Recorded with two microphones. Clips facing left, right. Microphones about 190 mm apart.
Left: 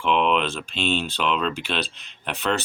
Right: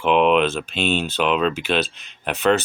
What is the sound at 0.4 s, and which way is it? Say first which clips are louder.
Speech: right 4 dB; centre (ahead or behind).